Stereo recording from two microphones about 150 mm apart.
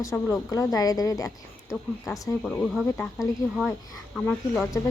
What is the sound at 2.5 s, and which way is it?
Speech, centre (ahead or behind).